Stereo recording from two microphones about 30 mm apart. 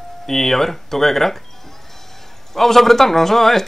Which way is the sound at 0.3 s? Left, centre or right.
Centre.